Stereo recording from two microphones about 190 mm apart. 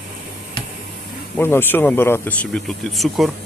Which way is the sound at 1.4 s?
10° left (ahead or behind).